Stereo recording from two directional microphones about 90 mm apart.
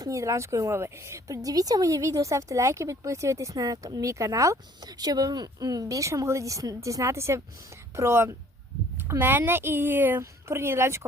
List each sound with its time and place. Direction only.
0.0 s a woman's voice: 35° right (ahead or behind)